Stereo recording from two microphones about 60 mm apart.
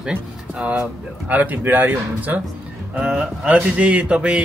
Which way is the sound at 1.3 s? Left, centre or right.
Right.